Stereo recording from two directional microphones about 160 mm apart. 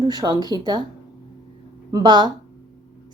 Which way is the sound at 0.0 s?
25° right (ahead or behind).